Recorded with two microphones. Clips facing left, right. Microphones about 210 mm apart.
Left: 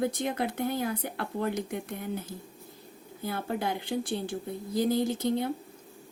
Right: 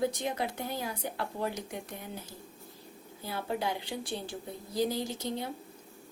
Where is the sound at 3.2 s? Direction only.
50° left (ahead or behind).